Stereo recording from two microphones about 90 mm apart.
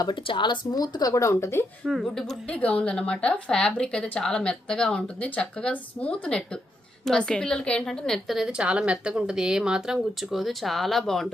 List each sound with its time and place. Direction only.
0.2 s speech: 70° left (ahead or behind); by 1.6 s 30° left (ahead or behind)
1.8 s a woman's voice: centre (ahead or behind)
2.5 s a woman's voice: 15° left (ahead or behind)